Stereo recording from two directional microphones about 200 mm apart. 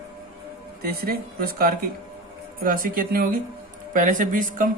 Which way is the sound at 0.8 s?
50° right (ahead or behind).